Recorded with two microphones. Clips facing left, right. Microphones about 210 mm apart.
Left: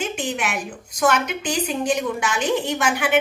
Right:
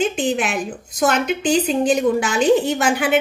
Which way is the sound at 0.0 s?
30° right (ahead or behind).